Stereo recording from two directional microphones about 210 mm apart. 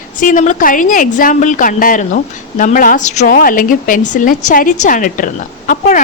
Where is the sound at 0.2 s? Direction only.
40° left (ahead or behind).